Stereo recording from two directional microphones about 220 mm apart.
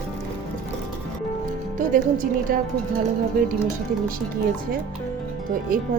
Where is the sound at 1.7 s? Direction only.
40° right (ahead or behind).